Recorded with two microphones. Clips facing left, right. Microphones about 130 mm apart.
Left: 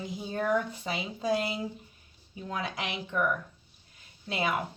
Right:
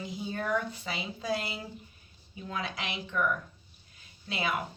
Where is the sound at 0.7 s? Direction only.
50° left (ahead or behind).